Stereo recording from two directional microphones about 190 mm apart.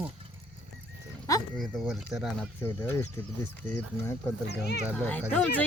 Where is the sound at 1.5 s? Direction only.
Centre (ahead or behind).